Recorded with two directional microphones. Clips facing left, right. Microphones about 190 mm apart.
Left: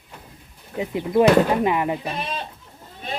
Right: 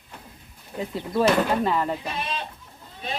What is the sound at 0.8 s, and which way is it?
Speech, 15° left (ahead or behind).